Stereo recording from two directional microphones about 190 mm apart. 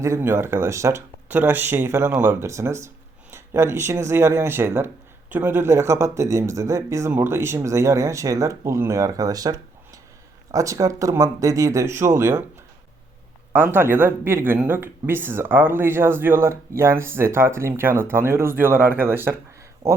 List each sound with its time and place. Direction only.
0.0 s speech: 15° right (ahead or behind)
13.5 s speech: 10° right (ahead or behind)